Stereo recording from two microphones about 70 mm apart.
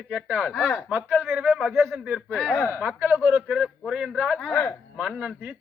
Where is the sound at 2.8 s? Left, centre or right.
Right.